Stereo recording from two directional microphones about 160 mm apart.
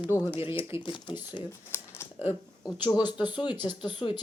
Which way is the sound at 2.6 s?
25° left (ahead or behind).